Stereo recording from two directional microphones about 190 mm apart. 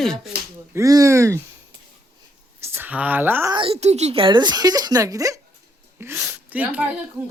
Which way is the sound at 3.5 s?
30° right (ahead or behind).